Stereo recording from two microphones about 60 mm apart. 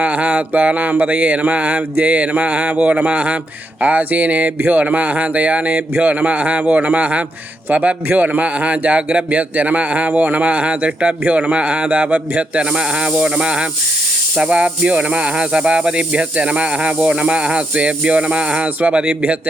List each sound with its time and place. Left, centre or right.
0.0 s speech: right